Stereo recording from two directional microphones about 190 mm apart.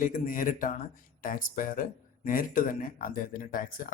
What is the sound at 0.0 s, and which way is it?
Speech, 45° left (ahead or behind).